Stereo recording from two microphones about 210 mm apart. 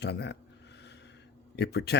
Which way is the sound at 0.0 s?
55° left (ahead or behind).